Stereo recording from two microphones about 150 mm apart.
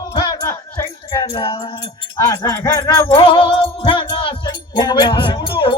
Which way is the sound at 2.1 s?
20° left (ahead or behind).